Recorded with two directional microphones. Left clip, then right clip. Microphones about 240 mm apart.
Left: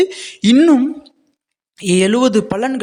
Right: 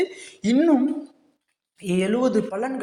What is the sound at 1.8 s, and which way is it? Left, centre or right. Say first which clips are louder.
Speech: left 9 dB; left.